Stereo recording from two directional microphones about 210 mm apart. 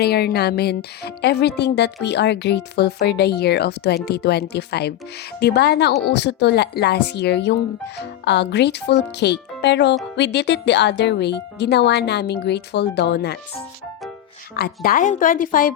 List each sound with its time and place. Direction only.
0.0 s speech: 50° left (ahead or behind)
14.5 s a woman's voice: 50° left (ahead or behind)